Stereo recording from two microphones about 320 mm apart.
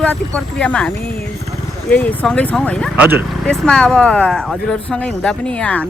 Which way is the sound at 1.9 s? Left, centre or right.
Centre.